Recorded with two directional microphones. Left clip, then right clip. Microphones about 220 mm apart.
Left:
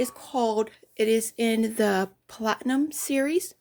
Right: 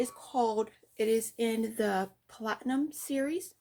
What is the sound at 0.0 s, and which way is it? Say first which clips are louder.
Speech: left 4 dB; 40° left (ahead or behind).